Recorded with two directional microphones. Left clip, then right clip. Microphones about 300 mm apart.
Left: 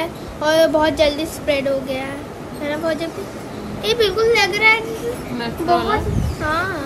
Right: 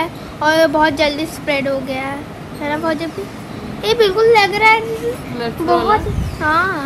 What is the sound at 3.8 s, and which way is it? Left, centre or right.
A child's voice, centre.